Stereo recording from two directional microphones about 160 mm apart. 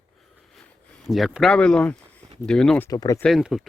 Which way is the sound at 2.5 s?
5° left (ahead or behind).